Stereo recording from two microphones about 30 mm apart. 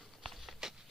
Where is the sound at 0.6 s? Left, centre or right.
Centre.